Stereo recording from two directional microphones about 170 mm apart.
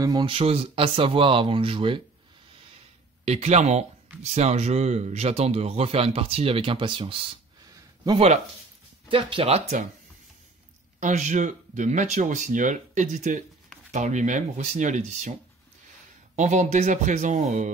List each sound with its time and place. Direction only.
0.0 s speech: 25° right (ahead or behind)
3.3 s speech: 40° right (ahead or behind)
11.0 s speech: 45° right (ahead or behind)
16.3 s speech: 45° right (ahead or behind)